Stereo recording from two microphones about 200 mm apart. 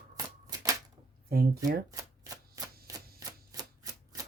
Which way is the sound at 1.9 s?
15° right (ahead or behind).